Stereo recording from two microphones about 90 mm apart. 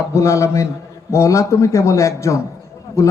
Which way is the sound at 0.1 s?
35° left (ahead or behind).